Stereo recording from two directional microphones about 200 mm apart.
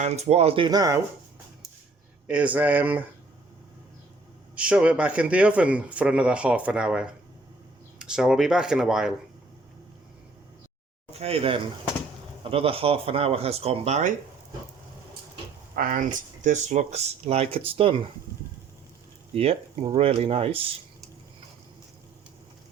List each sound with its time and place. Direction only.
0.0 s speech: 35° right (ahead or behind); by 1.0 s 15° right (ahead or behind)
2.2 s speech: 5° right (ahead or behind)
4.5 s speech: 5° right (ahead or behind)
11.1 s speech: 30° right (ahead or behind)
15.7 s speech: 45° right (ahead or behind); by 18.1 s 25° right (ahead or behind)
19.3 s speech: 30° right (ahead or behind)